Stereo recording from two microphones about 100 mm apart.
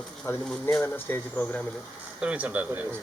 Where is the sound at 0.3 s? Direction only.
25° left (ahead or behind).